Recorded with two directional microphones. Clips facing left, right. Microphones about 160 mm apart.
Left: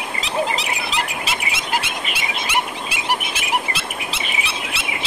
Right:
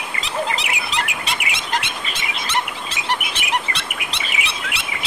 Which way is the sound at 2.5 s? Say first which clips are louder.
Even; 10° left (ahead or behind).